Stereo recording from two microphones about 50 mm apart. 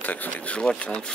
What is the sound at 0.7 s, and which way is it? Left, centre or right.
Speech, left.